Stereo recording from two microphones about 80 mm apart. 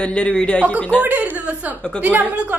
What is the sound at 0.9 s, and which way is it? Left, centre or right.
A woman's voice, right.